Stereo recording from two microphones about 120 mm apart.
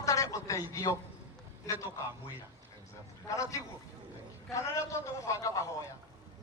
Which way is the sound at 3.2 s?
25° left (ahead or behind).